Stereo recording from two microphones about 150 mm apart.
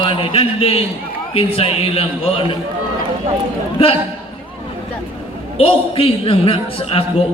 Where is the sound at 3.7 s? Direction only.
40° left (ahead or behind).